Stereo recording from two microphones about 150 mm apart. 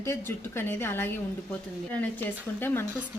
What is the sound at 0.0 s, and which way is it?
Speech, 15° left (ahead or behind).